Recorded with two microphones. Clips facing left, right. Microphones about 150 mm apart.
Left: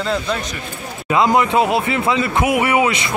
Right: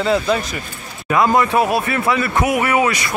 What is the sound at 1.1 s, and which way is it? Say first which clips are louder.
Speech: even; 20° left (ahead or behind).